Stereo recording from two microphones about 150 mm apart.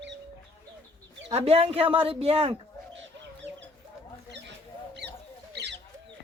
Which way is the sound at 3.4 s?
15° left (ahead or behind).